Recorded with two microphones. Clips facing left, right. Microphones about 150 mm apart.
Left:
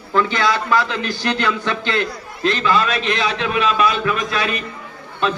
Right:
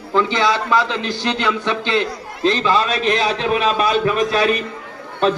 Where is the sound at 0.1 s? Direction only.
20° right (ahead or behind).